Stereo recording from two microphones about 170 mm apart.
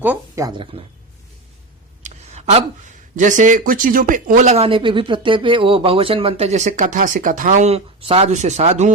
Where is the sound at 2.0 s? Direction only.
40° right (ahead or behind).